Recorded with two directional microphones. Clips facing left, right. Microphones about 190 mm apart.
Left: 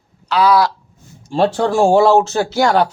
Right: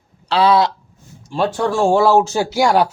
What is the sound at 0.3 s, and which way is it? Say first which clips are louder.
Speech: even; 30° right (ahead or behind).